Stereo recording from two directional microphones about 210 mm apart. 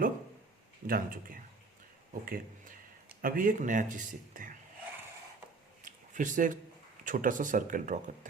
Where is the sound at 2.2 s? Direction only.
40° right (ahead or behind).